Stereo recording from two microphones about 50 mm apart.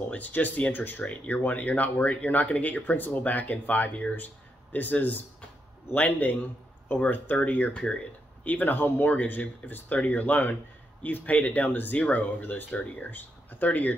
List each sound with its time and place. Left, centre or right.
0.1 s speech: left
5.9 s speech: left